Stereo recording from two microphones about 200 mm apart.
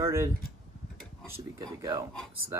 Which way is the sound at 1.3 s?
15° right (ahead or behind).